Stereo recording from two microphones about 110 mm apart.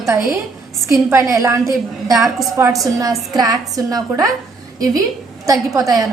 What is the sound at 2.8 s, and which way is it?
A woman's voice, 30° right (ahead or behind).